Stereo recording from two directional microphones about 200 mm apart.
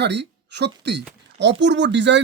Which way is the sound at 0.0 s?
60° right (ahead or behind).